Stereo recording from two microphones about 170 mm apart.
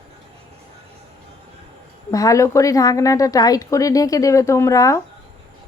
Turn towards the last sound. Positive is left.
turn(degrees=20)  # may be behind; listen again after turning